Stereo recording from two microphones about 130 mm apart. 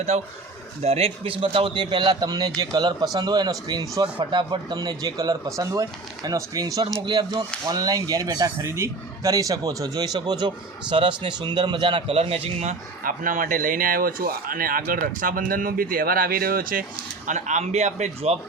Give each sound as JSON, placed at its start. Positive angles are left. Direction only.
{"t": 0.1, "sound": "a man's voice", "side_deg": -60}
{"t": 13.0, "sound": "speech", "side_deg": -90}
{"t": 17.2, "sound": "a man's voice", "side_deg": -70}